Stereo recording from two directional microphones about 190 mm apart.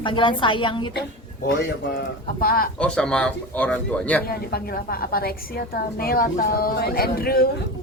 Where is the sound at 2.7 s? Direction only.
5° left (ahead or behind).